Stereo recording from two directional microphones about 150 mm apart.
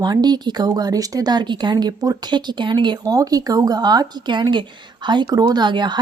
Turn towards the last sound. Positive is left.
turn(degrees=-30)  # may be behind; listen again after turning